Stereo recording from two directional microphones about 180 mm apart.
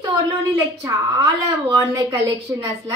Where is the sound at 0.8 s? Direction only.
20° right (ahead or behind).